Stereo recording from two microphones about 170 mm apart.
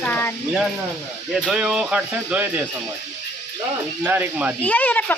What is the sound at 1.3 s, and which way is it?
Speech, centre (ahead or behind).